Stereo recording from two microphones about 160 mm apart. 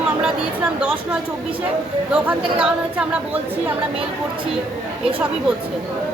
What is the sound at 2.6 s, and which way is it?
A woman's voice, 10° right (ahead or behind).